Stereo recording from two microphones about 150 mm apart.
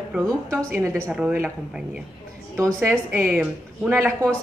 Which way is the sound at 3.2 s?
15° right (ahead or behind).